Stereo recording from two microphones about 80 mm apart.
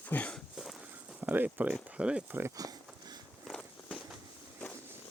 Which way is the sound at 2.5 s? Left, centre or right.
Right.